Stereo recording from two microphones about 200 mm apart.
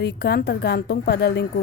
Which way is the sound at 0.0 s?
55° left (ahead or behind).